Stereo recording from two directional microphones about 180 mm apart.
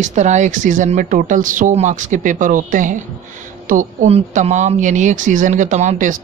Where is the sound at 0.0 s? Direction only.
40° right (ahead or behind).